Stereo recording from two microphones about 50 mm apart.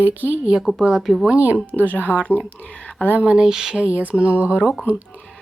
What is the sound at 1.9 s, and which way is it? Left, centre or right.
Speech, right.